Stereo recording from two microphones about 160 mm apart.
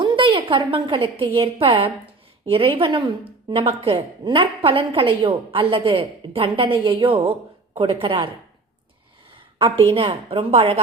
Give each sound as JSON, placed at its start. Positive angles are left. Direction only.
{"t": 0.0, "sound": "a woman's voice", "side_deg": -30}
{"t": 9.6, "sound": "a woman's voice", "side_deg": -35}